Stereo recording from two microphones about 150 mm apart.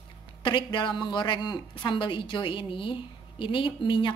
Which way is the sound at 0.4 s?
30° left (ahead or behind).